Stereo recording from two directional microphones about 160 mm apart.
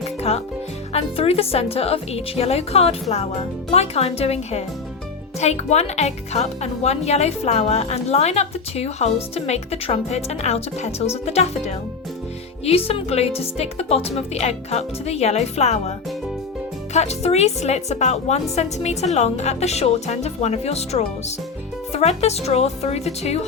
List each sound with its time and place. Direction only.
0.2 s music: 40° left (ahead or behind)
0.9 s speech: 40° left (ahead or behind)
16.9 s speech: 45° left (ahead or behind)